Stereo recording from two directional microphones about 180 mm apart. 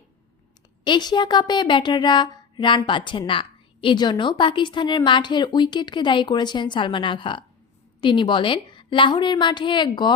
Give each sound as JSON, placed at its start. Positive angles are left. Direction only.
{"t": 0.9, "sound": "speech", "side_deg": 25}